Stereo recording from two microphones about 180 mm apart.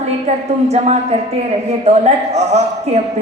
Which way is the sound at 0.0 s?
35° right (ahead or behind).